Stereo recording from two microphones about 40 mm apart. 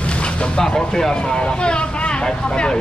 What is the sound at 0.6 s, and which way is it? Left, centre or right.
Speech, centre.